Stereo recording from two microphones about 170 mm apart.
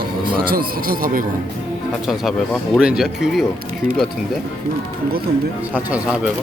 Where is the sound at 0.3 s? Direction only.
60° right (ahead or behind).